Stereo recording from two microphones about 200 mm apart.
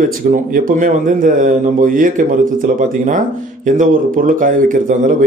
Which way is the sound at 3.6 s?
40° right (ahead or behind).